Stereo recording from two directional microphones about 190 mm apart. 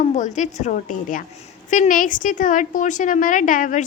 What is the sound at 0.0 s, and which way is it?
A woman's voice, 40° left (ahead or behind).